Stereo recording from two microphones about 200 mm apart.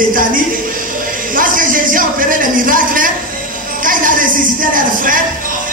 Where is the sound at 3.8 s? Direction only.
40° right (ahead or behind).